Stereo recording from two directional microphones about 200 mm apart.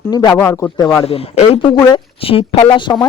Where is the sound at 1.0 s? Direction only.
30° left (ahead or behind).